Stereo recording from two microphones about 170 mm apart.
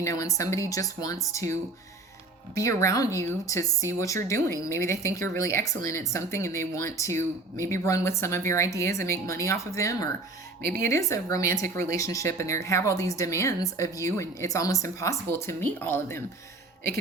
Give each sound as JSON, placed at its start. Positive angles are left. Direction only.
{"t": 0.0, "sound": "speech", "side_deg": 20}
{"t": 2.6, "sound": "a woman's voice", "side_deg": 20}